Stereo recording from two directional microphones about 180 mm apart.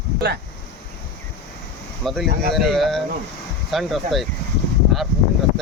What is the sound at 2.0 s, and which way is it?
Speech, centre (ahead or behind).